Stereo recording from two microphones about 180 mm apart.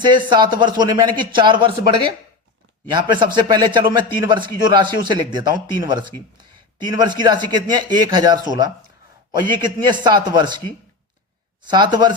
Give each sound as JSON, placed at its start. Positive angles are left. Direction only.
{"t": 0.0, "sound": "a man's voice", "side_deg": -25}
{"t": 11.7, "sound": "a man's voice", "side_deg": -25}